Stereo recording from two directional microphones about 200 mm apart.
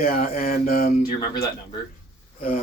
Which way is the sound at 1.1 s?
20° left (ahead or behind).